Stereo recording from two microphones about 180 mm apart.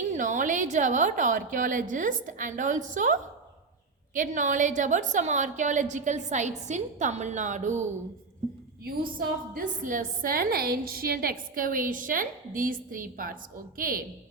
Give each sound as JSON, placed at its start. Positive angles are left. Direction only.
{"t": 0.1, "sound": "a woman's voice", "side_deg": -45}
{"t": 9.1, "sound": "a woman's voice", "side_deg": -50}